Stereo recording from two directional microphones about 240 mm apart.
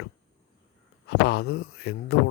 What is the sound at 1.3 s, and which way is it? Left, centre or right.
Speech, left.